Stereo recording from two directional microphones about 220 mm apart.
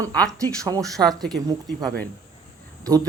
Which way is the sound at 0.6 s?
15° right (ahead or behind).